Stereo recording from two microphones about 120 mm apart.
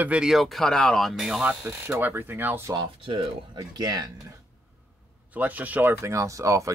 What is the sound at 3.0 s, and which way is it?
Speech, 45° right (ahead or behind).